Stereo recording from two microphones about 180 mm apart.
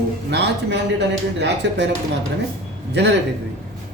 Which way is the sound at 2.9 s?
70° right (ahead or behind).